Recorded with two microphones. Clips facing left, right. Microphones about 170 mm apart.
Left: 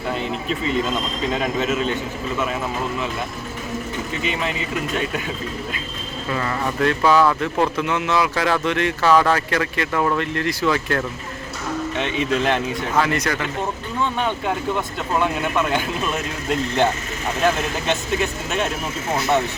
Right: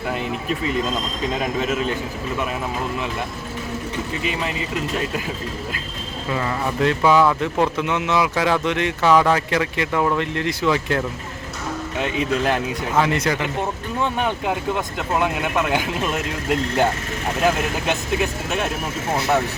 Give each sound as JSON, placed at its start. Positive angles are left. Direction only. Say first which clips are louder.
{"t": 0.1, "sound": "speech", "louder": "left 1 dB", "side_deg": -5}
{"t": 4.2, "sound": "speech", "louder": "left 2 dB", "side_deg": 0}
{"t": 6.3, "sound": "speech", "louder": "even", "side_deg": -15}
{"t": 11.9, "sound": "speech", "louder": "right 1 dB", "side_deg": -5}
{"t": 13.0, "sound": "speech", "louder": "right 1 dB", "side_deg": -25}
{"t": 14.2, "sound": "speech", "louder": "even", "side_deg": -10}